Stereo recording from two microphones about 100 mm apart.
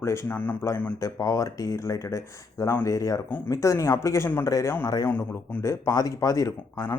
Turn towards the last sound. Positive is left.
turn(degrees=35)  # may be behind; listen again after turning